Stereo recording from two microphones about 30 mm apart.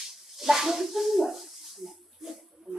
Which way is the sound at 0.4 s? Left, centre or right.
Centre.